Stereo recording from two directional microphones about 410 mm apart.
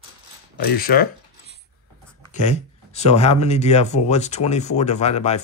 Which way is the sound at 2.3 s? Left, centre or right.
Centre.